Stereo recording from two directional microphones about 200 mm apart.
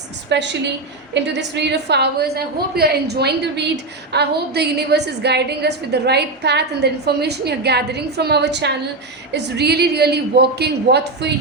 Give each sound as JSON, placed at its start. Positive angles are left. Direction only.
{"t": 0.3, "sound": "a woman's voice", "side_deg": -60}